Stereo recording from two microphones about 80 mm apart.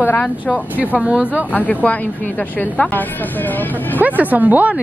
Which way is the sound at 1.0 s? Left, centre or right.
Centre.